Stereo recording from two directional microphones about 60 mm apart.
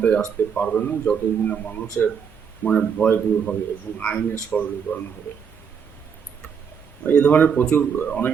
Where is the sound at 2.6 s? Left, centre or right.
Centre.